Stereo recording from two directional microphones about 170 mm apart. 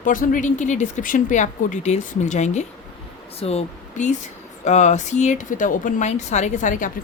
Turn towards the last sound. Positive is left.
turn(degrees=50)  # may be behind; listen again after turning